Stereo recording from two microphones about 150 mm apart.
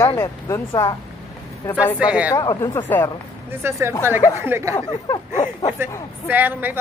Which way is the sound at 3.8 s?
15° right (ahead or behind).